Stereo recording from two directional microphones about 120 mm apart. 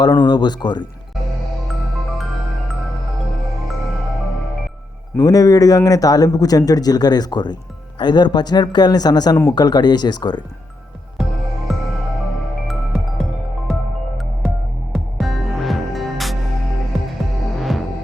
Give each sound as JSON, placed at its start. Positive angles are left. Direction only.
{"t": 0.3, "sound": "speech", "side_deg": 35}
{"t": 2.1, "sound": "music", "side_deg": 0}
{"t": 5.1, "sound": "speech", "side_deg": 30}
{"t": 12.6, "sound": "music", "side_deg": 0}
{"t": 14.9, "sound": "music", "side_deg": 0}